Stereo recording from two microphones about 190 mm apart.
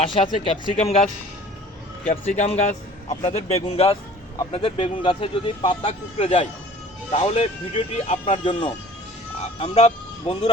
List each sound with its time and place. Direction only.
0.0 s a man's voice: 30° left (ahead or behind)